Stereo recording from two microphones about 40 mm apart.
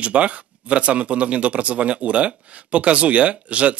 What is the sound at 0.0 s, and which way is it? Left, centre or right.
A man's voice, right.